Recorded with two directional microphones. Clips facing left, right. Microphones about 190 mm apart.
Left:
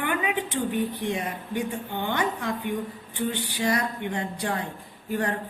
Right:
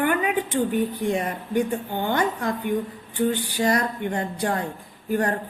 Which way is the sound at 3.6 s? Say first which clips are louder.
Right 3 dB; 45° right (ahead or behind).